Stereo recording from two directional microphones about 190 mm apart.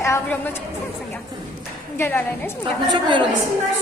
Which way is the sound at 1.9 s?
10° left (ahead or behind).